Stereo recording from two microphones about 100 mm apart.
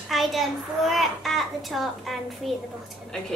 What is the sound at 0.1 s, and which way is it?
A child's voice, centre (ahead or behind).